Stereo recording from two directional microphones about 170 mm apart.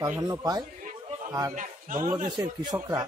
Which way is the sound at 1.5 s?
50° right (ahead or behind).